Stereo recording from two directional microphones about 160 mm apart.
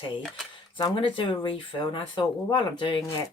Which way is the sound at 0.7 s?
30° left (ahead or behind).